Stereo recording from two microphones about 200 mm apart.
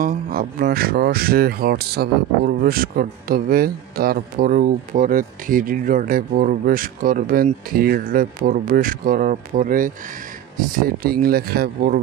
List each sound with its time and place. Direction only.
0.0 s speech: 45° right (ahead or behind)